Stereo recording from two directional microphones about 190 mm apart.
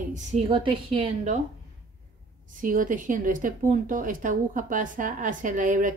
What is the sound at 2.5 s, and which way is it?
Speech, 45° right (ahead or behind).